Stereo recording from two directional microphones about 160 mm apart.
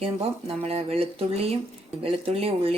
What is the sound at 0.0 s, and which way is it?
Speech, 35° right (ahead or behind).